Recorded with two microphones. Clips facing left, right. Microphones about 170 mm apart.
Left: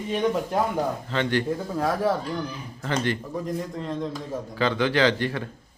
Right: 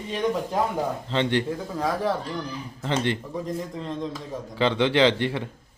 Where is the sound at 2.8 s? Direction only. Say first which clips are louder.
Right 1 dB; 25° right (ahead or behind).